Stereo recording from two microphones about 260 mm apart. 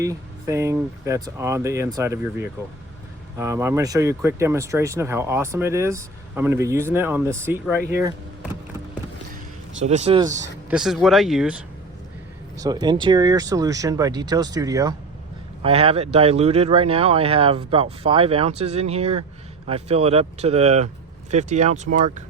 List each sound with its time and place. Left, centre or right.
0.0 s speech: centre
9.8 s speech: right
10.7 s speech: centre
12.5 s speech: centre